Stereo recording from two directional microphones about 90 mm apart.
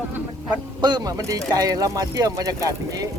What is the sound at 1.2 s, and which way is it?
Speech, 40° right (ahead or behind).